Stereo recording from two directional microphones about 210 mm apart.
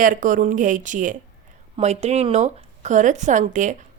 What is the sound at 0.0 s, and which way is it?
A woman's voice, 40° right (ahead or behind).